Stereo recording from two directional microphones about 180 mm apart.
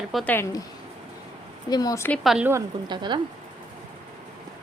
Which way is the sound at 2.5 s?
20° right (ahead or behind).